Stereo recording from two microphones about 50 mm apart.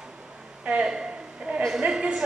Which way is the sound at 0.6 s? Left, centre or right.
Right.